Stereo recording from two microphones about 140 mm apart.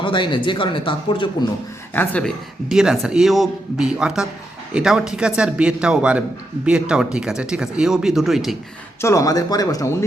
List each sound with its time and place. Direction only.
0.0 s speech: 35° left (ahead or behind)
1.9 s a man's voice: 10° left (ahead or behind)
9.0 s speech: 20° left (ahead or behind)